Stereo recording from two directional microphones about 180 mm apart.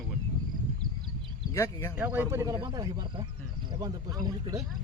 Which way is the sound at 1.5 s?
15° left (ahead or behind).